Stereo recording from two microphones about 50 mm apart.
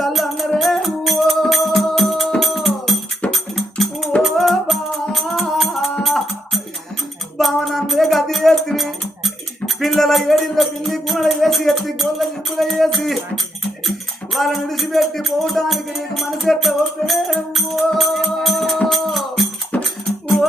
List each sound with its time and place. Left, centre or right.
0.0 s music: centre
7.3 s a sound: centre
9.8 s music: centre
19.7 s music: left
20.1 s music: centre